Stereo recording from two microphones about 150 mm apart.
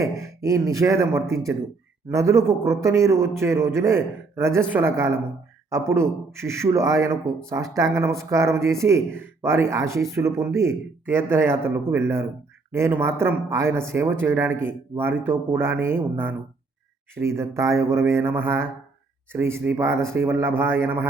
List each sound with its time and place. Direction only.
0.0 s a man's voice: 20° right (ahead or behind)